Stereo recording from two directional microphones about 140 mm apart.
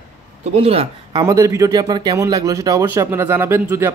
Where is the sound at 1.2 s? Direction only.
25° right (ahead or behind).